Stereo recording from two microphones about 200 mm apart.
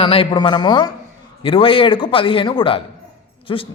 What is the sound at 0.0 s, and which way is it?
A man's voice, 25° left (ahead or behind).